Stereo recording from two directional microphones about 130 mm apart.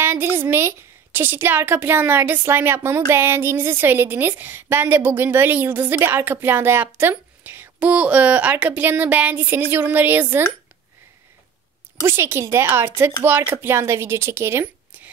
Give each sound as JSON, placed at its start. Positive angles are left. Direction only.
{"t": 0.0, "sound": "a woman's voice", "side_deg": -15}
{"t": 12.0, "sound": "speech", "side_deg": -20}